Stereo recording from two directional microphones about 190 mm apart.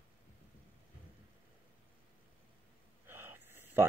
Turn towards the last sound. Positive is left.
turn(degrees=-10)  # may be behind; listen again after turning